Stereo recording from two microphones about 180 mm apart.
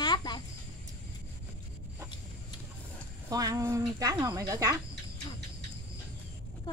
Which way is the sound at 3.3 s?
20° right (ahead or behind).